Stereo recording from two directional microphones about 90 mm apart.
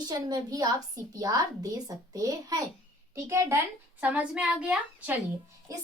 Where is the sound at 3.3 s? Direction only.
30° right (ahead or behind).